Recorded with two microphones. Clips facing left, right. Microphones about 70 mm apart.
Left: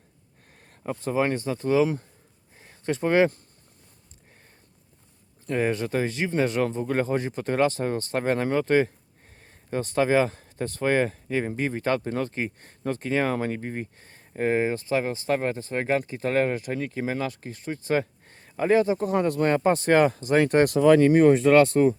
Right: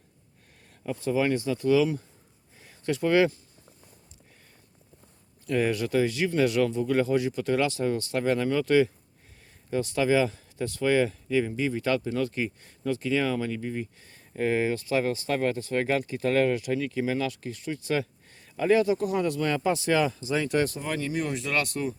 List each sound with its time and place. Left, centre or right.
0.9 s speech: left
2.6 s a sound: left
5.5 s speech: left
20.7 s speech: left
21.0 s speech: left